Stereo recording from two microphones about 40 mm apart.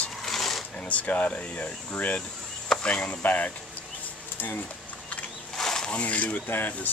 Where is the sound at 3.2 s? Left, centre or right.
Left.